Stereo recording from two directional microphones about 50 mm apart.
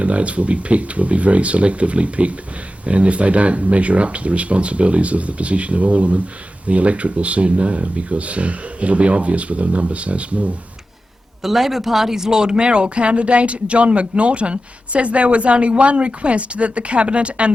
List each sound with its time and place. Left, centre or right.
0.0 s speech: right
11.4 s speech: centre; by 17.5 s right